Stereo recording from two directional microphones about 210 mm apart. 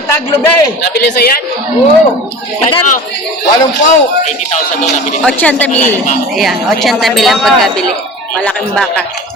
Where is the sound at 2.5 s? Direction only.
25° left (ahead or behind).